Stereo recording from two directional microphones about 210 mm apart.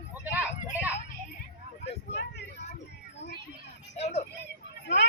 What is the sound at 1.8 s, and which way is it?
Vehicle, 55° left (ahead or behind).